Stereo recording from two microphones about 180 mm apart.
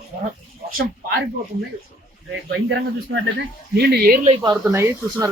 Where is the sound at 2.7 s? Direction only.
80° right; by 4.3 s 55° right (ahead or behind).